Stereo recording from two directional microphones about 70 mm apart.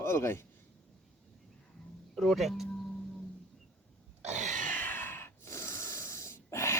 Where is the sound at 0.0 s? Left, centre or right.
Left.